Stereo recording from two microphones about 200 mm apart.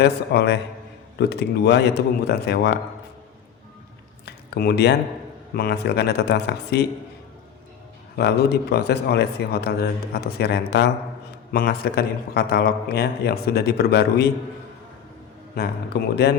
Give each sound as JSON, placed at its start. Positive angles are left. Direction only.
{"t": 0.0, "sound": "speech", "side_deg": 55}
{"t": 4.3, "sound": "a sound", "side_deg": 55}
{"t": 5.5, "sound": "speech", "side_deg": 55}
{"t": 8.1, "sound": "speech", "side_deg": 55}
{"t": 15.5, "sound": "speech", "side_deg": 50}